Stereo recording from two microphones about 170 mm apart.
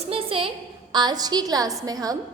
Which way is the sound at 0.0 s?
35° right (ahead or behind).